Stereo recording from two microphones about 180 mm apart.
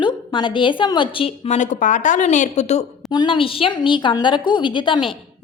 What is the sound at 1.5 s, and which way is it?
Speech, 45° left (ahead or behind).